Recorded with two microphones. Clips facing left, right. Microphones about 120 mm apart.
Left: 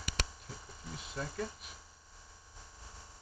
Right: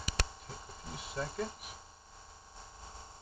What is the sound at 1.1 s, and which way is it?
Speech, 30° right (ahead or behind).